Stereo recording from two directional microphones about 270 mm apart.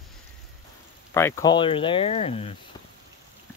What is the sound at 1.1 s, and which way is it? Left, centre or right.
Speech, centre.